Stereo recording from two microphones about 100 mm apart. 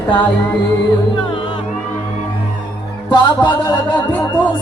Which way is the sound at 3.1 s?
50° left (ahead or behind).